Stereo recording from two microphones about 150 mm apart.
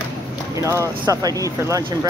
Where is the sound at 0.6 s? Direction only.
20° right (ahead or behind).